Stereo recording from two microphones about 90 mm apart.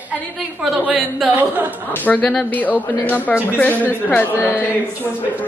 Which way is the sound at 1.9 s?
15° left (ahead or behind).